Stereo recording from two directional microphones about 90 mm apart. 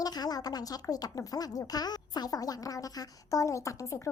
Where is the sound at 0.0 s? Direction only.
45° left (ahead or behind).